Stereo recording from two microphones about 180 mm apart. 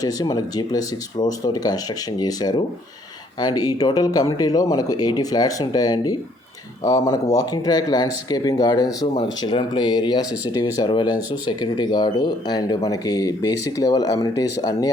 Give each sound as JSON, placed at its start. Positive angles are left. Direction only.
{"t": 0.0, "sound": "speech", "side_deg": 20}